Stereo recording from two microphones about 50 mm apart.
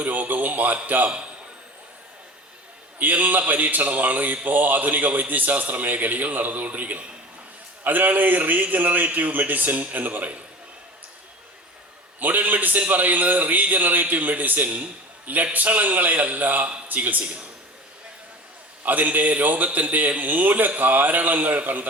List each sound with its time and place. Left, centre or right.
0.0 s speech: right
3.0 s speech: right
12.2 s speech: right
18.9 s speech: right